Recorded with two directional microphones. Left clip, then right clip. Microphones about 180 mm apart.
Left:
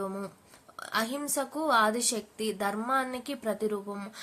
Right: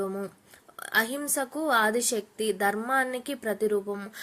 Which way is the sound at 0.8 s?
20° right (ahead or behind).